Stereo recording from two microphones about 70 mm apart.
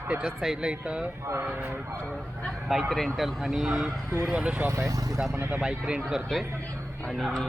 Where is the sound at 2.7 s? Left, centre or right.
Centre.